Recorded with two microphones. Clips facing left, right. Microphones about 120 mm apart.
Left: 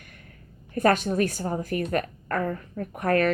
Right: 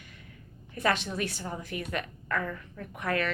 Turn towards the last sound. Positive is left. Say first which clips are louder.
# left 8 dB
turn(degrees=45)  # may be behind; listen again after turning